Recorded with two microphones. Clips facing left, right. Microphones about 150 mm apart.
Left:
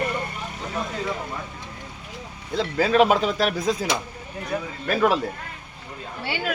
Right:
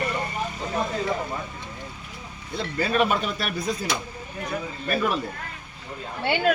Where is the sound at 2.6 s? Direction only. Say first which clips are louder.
Left 5 dB; 90° left.